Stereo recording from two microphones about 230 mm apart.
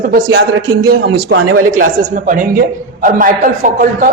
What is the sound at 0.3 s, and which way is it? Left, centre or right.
A man's voice, right.